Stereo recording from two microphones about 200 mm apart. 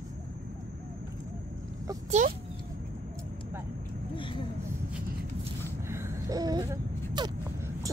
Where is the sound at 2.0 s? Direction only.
40° right (ahead or behind).